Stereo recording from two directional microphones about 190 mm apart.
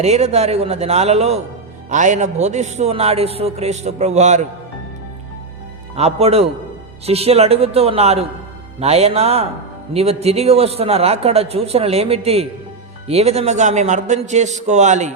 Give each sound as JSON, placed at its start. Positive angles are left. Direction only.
{"t": 0.0, "sound": "a man's voice", "side_deg": -35}
{"t": 6.0, "sound": "a man's voice", "side_deg": -35}